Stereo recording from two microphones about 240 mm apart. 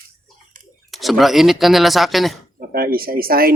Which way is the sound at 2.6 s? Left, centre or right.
Right.